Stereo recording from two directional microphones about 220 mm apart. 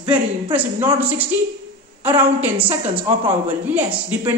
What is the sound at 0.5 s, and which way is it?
A woman's voice, 10° right (ahead or behind).